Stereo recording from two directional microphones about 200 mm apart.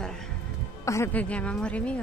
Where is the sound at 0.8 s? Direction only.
15° left (ahead or behind).